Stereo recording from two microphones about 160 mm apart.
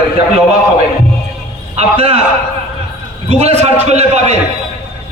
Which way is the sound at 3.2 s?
40° right (ahead or behind).